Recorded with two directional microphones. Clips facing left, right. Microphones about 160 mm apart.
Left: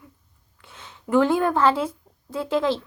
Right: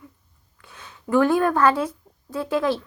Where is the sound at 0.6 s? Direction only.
25° left (ahead or behind).